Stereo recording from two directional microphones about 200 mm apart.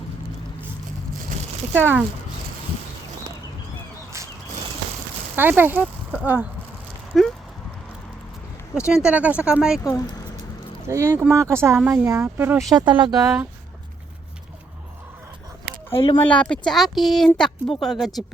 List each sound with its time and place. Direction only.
1.7 s speech: 10° right (ahead or behind)
5.4 s speech: 10° right (ahead or behind)
8.9 s speech: 5° right (ahead or behind)
10.8 s speech: 15° right (ahead or behind)
12.7 s speech: 25° right (ahead or behind)
15.9 s speech: 25° left (ahead or behind)
16.3 s speech: 5° left (ahead or behind)